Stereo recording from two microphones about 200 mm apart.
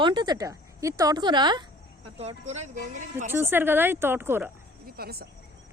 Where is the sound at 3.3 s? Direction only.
10° right (ahead or behind).